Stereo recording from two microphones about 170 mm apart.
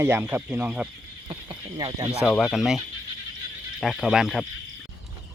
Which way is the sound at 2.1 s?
5° right (ahead or behind).